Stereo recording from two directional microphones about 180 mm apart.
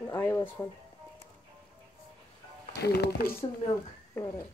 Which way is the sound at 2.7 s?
65° left (ahead or behind).